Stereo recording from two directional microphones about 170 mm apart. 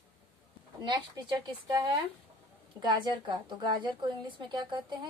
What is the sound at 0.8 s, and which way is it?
A woman's voice, 25° right (ahead or behind).